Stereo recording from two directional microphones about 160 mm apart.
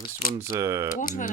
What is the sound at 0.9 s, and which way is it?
Speech, 55° left (ahead or behind).